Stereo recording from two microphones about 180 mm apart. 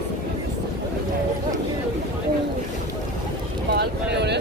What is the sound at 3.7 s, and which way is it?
Vehicle, 65° right (ahead or behind).